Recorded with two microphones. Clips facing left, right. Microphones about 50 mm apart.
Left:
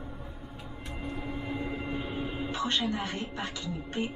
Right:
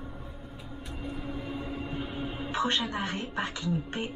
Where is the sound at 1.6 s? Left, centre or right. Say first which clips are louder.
Left 1 dB; left.